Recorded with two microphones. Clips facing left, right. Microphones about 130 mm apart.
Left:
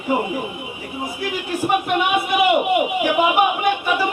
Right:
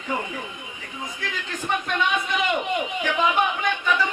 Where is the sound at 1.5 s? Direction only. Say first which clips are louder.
Left 7 dB; 10° left (ahead or behind).